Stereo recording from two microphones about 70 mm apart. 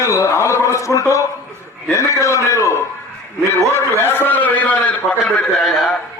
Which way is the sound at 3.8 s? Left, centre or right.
Left.